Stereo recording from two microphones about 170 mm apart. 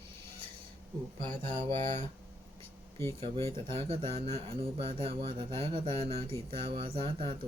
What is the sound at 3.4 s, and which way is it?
Speech, 30° right (ahead or behind).